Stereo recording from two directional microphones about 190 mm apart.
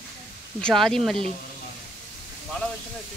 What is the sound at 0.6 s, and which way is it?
Speech, centre (ahead or behind).